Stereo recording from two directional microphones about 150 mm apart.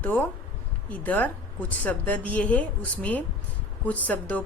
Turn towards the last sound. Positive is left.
turn(degrees=10)  # may be behind; listen again after turning